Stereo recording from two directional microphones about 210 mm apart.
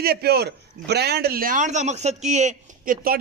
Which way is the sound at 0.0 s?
50° right (ahead or behind).